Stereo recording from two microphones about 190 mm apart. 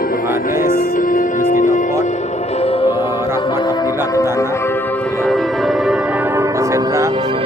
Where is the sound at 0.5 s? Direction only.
45° left (ahead or behind).